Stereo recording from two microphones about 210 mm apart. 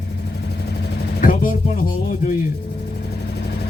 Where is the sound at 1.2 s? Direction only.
40° left (ahead or behind).